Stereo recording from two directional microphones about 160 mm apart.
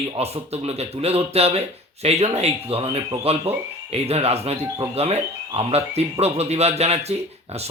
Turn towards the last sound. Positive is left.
turn(degrees=-40)  # may be behind; listen again after turning